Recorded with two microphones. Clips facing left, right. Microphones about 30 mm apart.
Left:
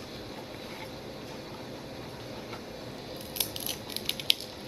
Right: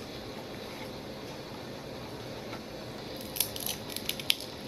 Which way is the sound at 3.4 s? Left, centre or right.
Centre.